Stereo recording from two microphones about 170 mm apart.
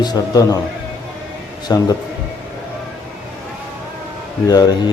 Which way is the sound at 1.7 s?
20° left (ahead or behind).